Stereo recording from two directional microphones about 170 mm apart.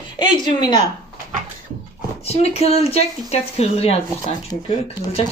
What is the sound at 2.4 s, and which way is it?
Speech, 40° left (ahead or behind).